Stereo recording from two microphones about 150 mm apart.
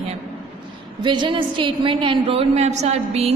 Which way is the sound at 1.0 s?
30° right (ahead or behind).